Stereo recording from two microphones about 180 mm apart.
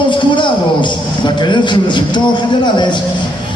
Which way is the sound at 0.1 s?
25° left (ahead or behind).